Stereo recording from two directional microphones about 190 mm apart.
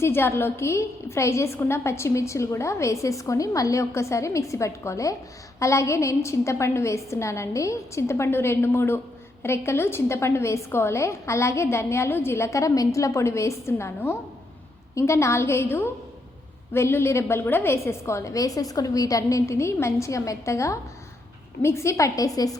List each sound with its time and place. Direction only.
0.0 s a woman's voice: 10° left (ahead or behind)